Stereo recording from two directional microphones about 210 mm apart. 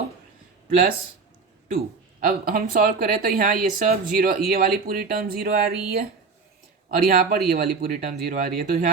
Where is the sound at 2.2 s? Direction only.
45° right (ahead or behind).